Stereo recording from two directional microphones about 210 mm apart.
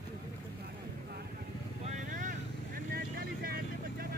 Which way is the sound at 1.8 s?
35° right (ahead or behind).